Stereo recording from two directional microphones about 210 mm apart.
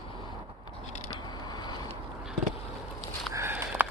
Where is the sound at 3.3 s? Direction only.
10° right (ahead or behind).